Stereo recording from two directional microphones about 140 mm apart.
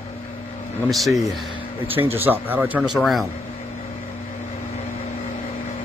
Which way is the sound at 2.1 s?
15° right (ahead or behind).